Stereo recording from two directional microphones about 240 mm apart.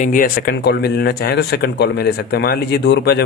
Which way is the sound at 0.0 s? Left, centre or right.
Left.